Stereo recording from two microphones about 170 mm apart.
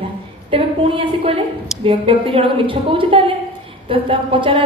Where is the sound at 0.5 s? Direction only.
30° right (ahead or behind).